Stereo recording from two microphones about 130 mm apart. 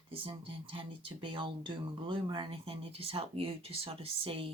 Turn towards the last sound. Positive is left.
turn(degrees=-45)  # may be behind; listen again after turning